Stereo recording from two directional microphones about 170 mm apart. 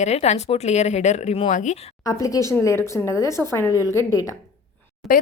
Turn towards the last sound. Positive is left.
turn(degrees=0)  # may be behind; listen again after turning